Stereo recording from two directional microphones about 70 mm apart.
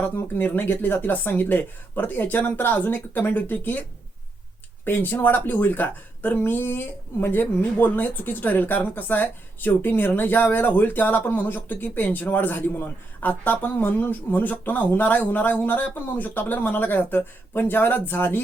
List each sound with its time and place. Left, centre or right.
0.0 s a woman's voice: left
4.9 s a woman's voice: left